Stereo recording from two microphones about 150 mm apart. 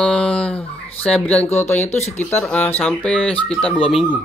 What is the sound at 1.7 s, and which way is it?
Speech, 50° left (ahead or behind).